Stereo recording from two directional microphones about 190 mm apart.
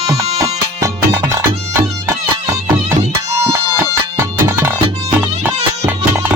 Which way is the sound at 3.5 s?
15° right (ahead or behind).